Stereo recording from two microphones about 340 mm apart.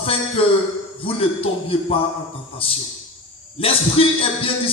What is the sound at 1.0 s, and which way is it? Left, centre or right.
A man's voice, centre.